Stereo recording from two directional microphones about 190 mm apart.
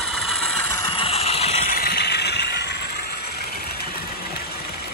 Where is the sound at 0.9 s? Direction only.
30° left (ahead or behind).